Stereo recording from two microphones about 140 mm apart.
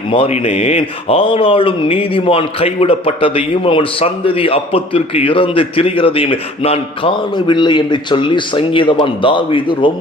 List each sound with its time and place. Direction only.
0.1 s speech: 45° left (ahead or behind)